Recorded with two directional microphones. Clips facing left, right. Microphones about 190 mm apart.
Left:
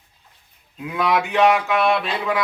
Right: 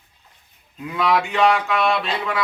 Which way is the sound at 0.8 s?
10° left (ahead or behind).